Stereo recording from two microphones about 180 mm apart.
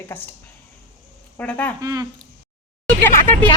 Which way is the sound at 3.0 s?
10° left (ahead or behind).